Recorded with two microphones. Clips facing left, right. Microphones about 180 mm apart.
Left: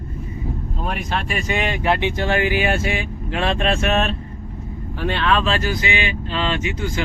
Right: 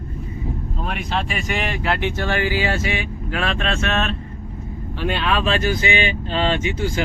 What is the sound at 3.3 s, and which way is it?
Speech, 30° left (ahead or behind).